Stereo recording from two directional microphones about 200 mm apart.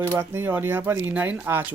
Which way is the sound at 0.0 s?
10° right (ahead or behind).